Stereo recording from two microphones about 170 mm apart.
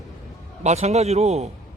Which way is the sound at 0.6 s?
40° right (ahead or behind).